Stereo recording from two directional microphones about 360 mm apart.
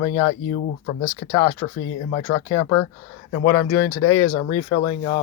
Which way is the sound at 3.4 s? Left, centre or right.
Left.